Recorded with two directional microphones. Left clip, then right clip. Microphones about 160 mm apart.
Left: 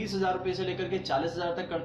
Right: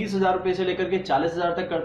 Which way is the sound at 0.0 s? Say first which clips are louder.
Right 7 dB; centre (ahead or behind).